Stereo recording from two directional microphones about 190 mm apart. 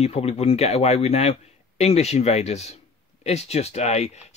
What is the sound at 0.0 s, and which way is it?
Speech, 35° left (ahead or behind).